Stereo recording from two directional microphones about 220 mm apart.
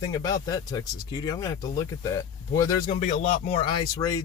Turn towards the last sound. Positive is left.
turn(degrees=15)  # may be behind; listen again after turning